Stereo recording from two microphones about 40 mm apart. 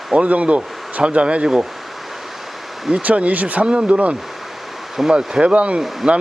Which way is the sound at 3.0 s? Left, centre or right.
Right.